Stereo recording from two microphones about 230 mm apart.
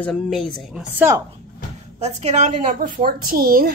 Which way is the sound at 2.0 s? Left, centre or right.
Right.